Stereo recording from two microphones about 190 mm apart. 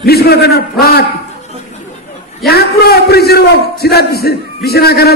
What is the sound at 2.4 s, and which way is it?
A man's voice, 55° left (ahead or behind).